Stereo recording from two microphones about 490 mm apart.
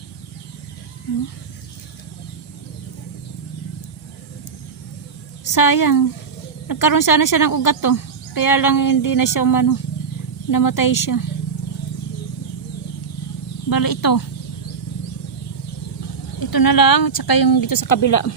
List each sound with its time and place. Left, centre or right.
5.5 s speech: left
13.7 s speech: left
16.5 s speech: left